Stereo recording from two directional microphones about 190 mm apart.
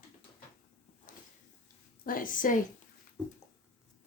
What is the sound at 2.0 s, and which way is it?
Speech, 45° left (ahead or behind).